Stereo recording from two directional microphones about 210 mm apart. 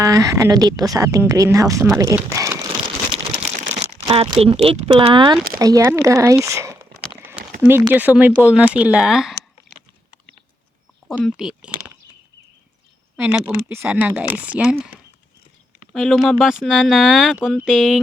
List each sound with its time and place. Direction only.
0.0 s speech: 15° right (ahead or behind)
3.5 s crumpling: 35° right (ahead or behind)
4.0 s speech: 25° right (ahead or behind); by 9.3 s centre (ahead or behind)
11.1 s speech: centre (ahead or behind)
13.1 s speech: 5° right (ahead or behind)
15.9 s speech: centre (ahead or behind)